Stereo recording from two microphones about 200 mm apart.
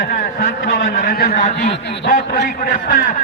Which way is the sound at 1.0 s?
40° left (ahead or behind).